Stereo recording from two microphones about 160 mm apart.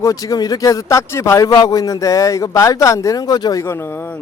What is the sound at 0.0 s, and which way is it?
Speech, 20° left (ahead or behind).